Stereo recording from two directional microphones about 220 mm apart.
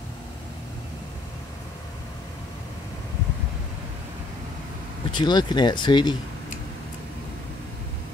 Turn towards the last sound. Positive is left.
turn(degrees=20)  # may be behind; listen again after turning